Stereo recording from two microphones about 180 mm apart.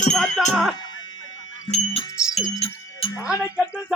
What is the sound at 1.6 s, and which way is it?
Music, 35° left (ahead or behind).